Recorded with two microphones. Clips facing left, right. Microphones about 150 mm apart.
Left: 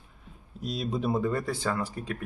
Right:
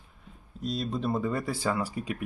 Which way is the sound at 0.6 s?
5° left (ahead or behind).